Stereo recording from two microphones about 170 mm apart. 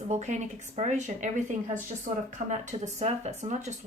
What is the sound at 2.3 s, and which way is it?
A woman's voice, 45° right (ahead or behind).